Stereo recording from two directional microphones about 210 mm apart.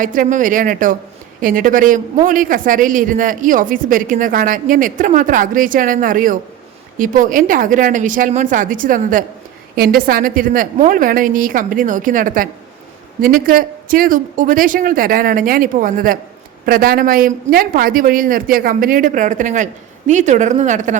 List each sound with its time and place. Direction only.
0.0 s speech: 40° right (ahead or behind)